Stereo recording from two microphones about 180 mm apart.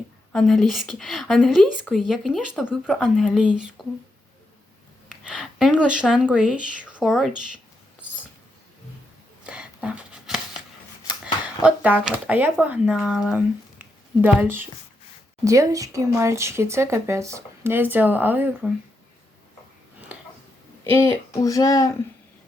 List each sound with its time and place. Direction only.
0.3 s speech: centre (ahead or behind)
5.0 s speech: 5° right (ahead or behind)
9.4 s a sound: 5° right (ahead or behind)
11.6 s speech: 10° right (ahead or behind)
20.9 s speech: 15° left (ahead or behind)